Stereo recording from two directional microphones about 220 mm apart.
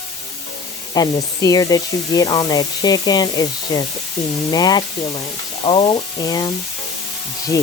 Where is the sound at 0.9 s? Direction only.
15° left (ahead or behind).